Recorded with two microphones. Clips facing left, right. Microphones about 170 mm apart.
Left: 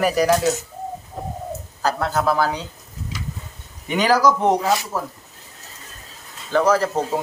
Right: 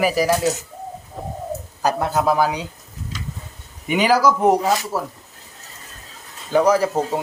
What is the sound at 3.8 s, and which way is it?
A man's voice, 10° right (ahead or behind).